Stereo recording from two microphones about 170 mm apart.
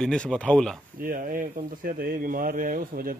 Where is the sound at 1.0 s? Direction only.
55° right (ahead or behind).